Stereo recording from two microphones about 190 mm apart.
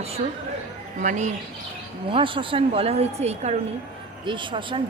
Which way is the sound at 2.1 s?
25° right (ahead or behind).